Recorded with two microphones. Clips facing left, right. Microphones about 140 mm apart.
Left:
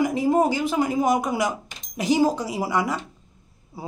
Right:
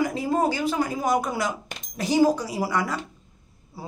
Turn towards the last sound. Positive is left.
turn(degrees=20)  # may be behind; listen again after turning